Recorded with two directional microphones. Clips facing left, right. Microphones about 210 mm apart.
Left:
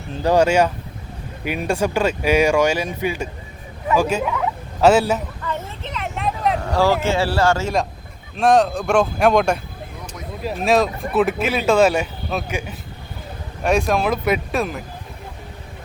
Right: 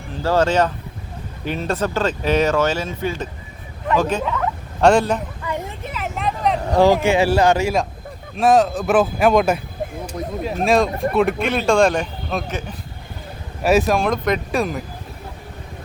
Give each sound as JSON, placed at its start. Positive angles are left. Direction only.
{"t": 0.1, "sound": "speech", "side_deg": 15}
{"t": 5.4, "sound": "vehicle", "side_deg": -15}
{"t": 6.7, "sound": "speech", "side_deg": -20}
{"t": 8.4, "sound": "speech", "side_deg": 0}
{"t": 13.6, "sound": "speech", "side_deg": -5}